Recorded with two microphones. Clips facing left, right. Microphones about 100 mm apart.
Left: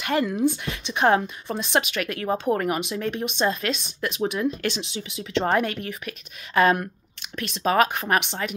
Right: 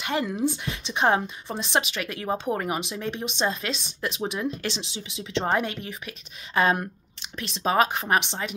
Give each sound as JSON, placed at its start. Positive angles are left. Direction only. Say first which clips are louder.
{"t": 0.0, "sound": "a woman's voice", "louder": "left 4 dB", "side_deg": -20}